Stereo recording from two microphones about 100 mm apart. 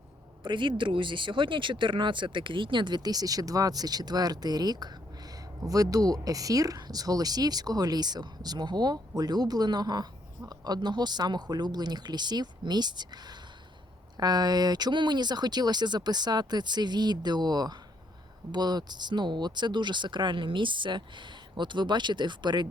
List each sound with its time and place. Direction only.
0.4 s speech: 50° right (ahead or behind)